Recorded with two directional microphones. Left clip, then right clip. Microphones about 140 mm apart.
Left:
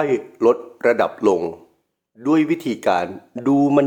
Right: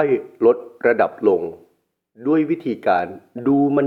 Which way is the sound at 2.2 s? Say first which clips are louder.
Left 1 dB; 20° left (ahead or behind).